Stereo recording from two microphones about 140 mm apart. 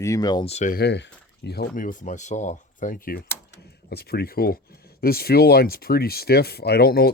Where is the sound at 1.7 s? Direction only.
65° left (ahead or behind).